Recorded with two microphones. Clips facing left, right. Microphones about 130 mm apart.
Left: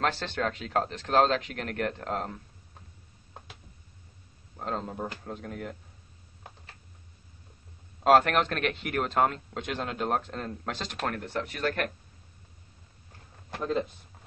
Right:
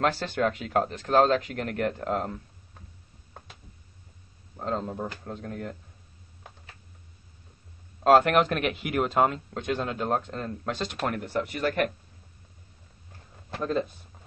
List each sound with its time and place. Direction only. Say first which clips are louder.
0.0 s speech: right 4 dB; 5° right (ahead or behind)
4.6 s speech: right 3 dB; centre (ahead or behind)
8.0 s speech: right 2 dB; centre (ahead or behind)
13.6 s speech: right 2 dB; 15° left (ahead or behind)